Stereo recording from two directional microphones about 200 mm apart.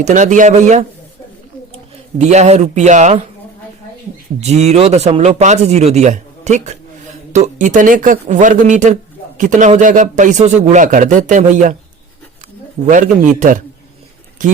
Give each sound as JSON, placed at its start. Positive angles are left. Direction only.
{"t": 0.0, "sound": "speech", "side_deg": -40}
{"t": 2.1, "sound": "speech", "side_deg": -35}
{"t": 4.4, "sound": "speech", "side_deg": -35}
{"t": 12.9, "sound": "speech", "side_deg": -40}